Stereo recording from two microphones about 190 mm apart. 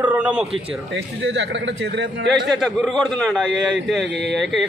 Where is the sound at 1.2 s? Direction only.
75° right (ahead or behind).